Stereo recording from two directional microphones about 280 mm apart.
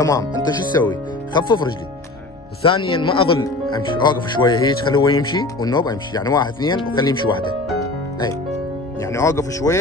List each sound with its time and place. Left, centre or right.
0.0 s speech: centre